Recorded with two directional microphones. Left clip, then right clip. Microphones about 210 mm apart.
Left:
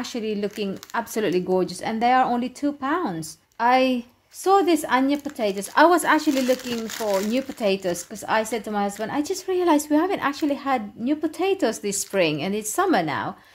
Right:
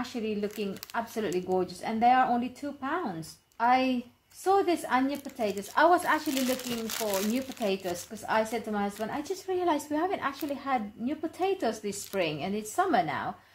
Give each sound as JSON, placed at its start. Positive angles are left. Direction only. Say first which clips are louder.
{"t": 0.0, "sound": "a woman's voice", "louder": "left 6 dB", "side_deg": 50}
{"t": 7.3, "sound": "a woman's voice", "louder": "left 8 dB", "side_deg": 50}